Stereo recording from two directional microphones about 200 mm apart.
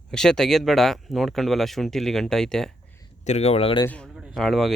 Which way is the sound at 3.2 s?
35° left (ahead or behind).